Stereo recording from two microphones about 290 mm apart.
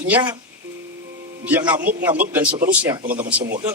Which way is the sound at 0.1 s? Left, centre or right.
Centre.